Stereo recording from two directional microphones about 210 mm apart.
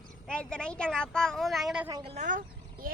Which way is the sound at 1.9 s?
25° right (ahead or behind).